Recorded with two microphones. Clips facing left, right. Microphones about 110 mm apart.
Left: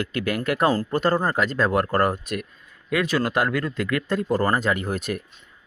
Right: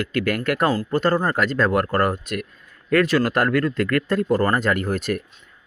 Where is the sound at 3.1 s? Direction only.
20° left (ahead or behind).